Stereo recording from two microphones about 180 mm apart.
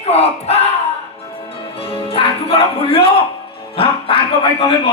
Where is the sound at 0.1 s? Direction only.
35° left (ahead or behind).